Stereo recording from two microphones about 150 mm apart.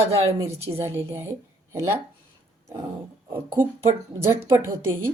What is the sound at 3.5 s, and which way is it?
A woman's voice, 15° right (ahead or behind).